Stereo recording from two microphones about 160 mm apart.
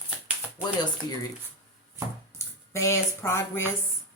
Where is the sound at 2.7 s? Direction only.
15° left (ahead or behind).